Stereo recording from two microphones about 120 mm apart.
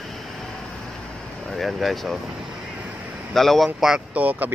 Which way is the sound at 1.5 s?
Centre (ahead or behind).